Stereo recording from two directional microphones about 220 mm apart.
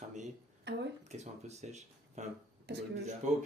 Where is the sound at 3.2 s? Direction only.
35° right (ahead or behind).